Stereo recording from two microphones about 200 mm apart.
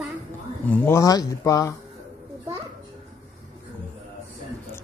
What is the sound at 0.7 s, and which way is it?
Speech, 10° left (ahead or behind).